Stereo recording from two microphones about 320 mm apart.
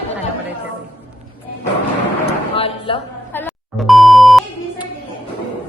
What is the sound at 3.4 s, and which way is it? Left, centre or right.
Beep, centre.